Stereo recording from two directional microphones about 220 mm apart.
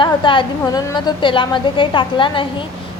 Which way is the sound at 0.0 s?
20° left (ahead or behind).